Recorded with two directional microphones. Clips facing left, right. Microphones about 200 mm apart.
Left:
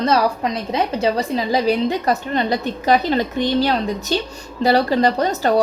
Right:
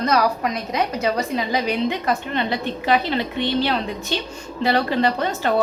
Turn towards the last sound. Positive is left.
turn(degrees=40)  # may be behind; listen again after turning